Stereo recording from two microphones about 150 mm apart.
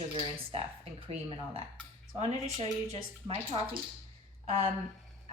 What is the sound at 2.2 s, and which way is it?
A woman's voice, 45° right (ahead or behind).